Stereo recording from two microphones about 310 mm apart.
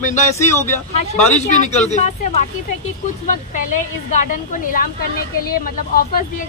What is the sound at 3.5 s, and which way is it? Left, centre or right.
Speech, left.